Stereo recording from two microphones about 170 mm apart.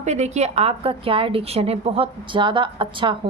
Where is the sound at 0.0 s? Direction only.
40° right (ahead or behind).